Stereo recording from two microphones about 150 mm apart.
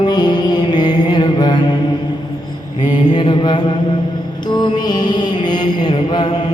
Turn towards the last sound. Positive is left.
turn(degrees=35)  # may be behind; listen again after turning